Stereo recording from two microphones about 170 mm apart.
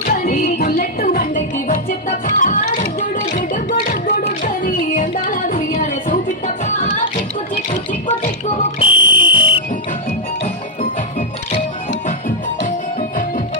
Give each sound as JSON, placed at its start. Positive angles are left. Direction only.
{"t": 0.3, "sound": "music", "side_deg": 55}
{"t": 7.5, "sound": "music", "side_deg": 40}
{"t": 8.5, "sound": "fire alarm", "side_deg": 30}
{"t": 9.2, "sound": "whistle", "side_deg": 30}
{"t": 12.6, "sound": "music", "side_deg": 50}